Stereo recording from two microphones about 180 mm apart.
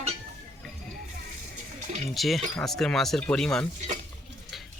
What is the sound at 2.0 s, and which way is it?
Speech, centre (ahead or behind).